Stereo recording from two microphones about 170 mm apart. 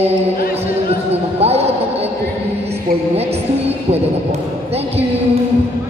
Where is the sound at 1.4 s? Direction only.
35° right (ahead or behind).